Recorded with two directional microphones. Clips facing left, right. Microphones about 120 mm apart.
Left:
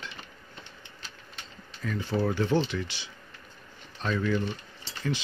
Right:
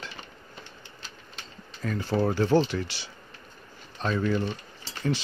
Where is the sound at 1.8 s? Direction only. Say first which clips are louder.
Right 2 dB; 40° right (ahead or behind).